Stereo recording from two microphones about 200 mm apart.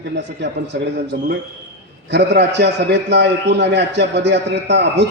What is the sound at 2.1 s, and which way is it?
A man's voice, 60° right (ahead or behind).